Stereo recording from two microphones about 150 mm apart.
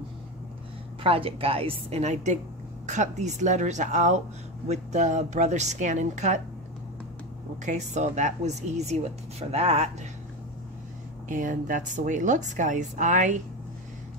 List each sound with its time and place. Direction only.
1.0 s a woman's voice: 40° right (ahead or behind)
7.6 s speech: 50° right (ahead or behind)
11.2 s a woman's voice: 60° right (ahead or behind)